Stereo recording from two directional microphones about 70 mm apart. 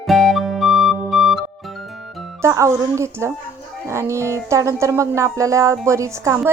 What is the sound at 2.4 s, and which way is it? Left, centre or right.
Speech, right.